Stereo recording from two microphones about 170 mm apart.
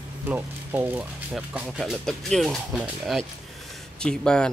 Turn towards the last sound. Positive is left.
turn(degrees=5)  # may be behind; listen again after turning